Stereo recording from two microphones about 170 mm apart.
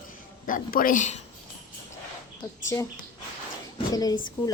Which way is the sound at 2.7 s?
20° left (ahead or behind).